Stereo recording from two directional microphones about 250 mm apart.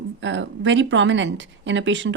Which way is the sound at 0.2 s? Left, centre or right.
Right.